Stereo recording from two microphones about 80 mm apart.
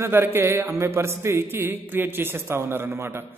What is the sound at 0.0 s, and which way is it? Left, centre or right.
A man's voice, right.